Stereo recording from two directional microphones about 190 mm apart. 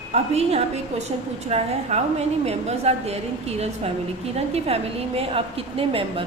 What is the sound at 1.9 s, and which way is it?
A woman's voice, 35° right (ahead or behind).